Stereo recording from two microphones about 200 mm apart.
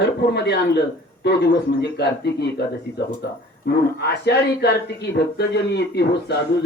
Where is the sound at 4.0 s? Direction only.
55° left (ahead or behind).